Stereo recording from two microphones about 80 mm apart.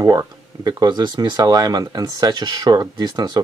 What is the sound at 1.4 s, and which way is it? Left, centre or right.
Speech, right.